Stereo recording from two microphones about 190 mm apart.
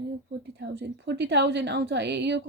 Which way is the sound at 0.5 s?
60° right (ahead or behind).